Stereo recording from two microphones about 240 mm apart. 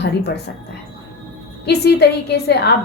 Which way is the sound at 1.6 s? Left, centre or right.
Left.